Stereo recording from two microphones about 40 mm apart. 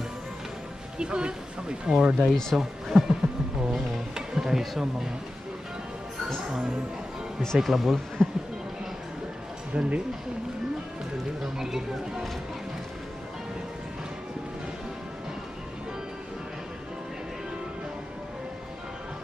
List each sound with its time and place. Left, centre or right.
0.9 s speech: right
2.0 s speech: centre
4.1 s speech: centre
7.5 s speech: centre
8.2 s speech: centre
9.8 s speech: right
11.5 s speech: centre